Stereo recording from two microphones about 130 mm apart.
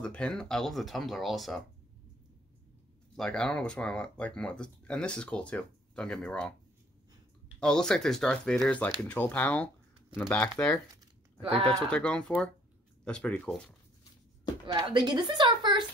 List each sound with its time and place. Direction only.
0.0 s speech: 5° left (ahead or behind)
3.2 s speech: 5° left (ahead or behind)
7.6 s speech: 5° left (ahead or behind); by 10.7 s 20° left (ahead or behind)
11.6 s speech: 10° left (ahead or behind)
14.7 s speech: 30° right (ahead or behind)